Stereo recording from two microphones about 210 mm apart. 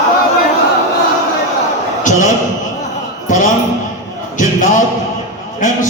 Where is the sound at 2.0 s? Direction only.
35° left (ahead or behind).